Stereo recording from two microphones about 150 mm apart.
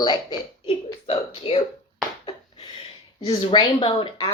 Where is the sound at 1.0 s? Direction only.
40° left (ahead or behind).